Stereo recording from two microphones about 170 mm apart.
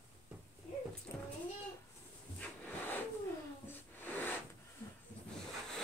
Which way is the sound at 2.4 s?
10° left (ahead or behind).